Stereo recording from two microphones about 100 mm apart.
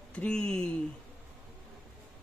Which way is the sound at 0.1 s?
10° left (ahead or behind).